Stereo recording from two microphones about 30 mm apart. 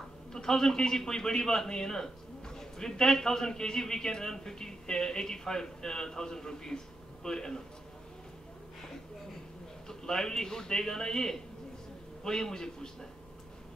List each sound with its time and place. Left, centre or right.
0.3 s a man's voice: centre
9.8 s a man's voice: left